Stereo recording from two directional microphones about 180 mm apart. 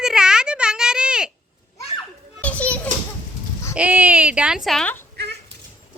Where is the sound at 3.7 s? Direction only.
10° right (ahead or behind).